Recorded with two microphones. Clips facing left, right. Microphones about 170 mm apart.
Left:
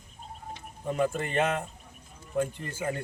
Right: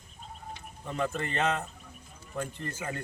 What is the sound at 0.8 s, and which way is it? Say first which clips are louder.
Speech: left 4 dB; 10° left (ahead or behind).